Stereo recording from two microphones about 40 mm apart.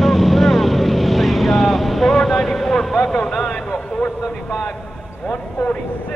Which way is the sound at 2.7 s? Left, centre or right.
Centre.